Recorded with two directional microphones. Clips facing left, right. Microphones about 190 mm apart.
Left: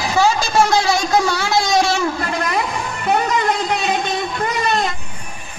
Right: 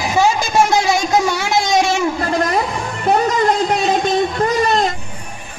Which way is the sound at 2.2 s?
40° right (ahead or behind).